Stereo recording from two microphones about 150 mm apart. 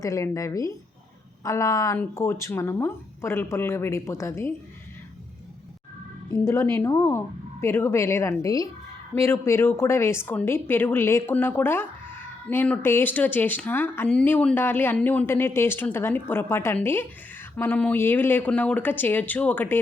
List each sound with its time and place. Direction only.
0.0 s a woman's voice: 20° left (ahead or behind)
6.3 s a woman's voice: 20° left (ahead or behind)